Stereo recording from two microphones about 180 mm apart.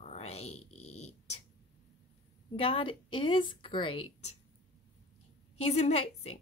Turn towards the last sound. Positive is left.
turn(degrees=35)  # may be behind; listen again after turning